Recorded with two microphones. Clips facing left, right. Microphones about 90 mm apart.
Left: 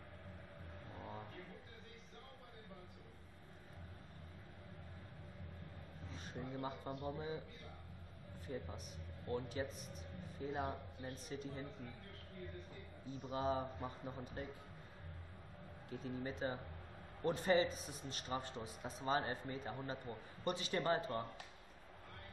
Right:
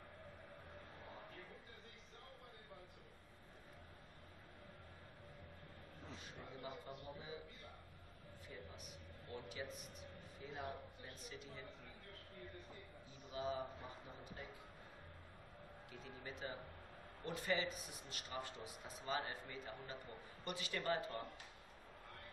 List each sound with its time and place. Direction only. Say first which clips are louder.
6.2 s speech: left 9 dB; 35° left (ahead or behind)
8.5 s speech: left 9 dB; 45° left (ahead or behind)
13.3 s speech: left 4 dB; 40° left (ahead or behind)
15.9 s speech: left 9 dB; 35° left (ahead or behind)